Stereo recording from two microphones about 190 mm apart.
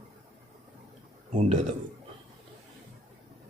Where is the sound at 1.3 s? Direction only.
40° right (ahead or behind).